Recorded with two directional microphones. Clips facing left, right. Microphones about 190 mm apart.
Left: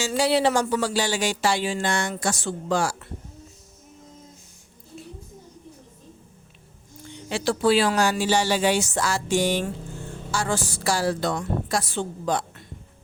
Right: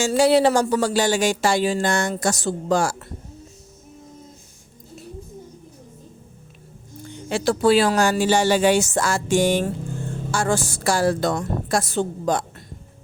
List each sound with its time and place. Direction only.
0.0 s speech: 45° right (ahead or behind)
7.1 s speech: 45° right (ahead or behind)